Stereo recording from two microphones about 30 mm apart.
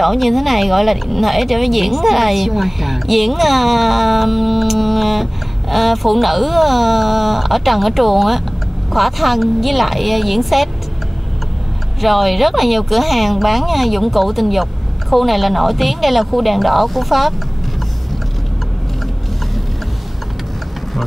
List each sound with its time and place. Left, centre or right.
0.0 s speech: centre
12.0 s speech: centre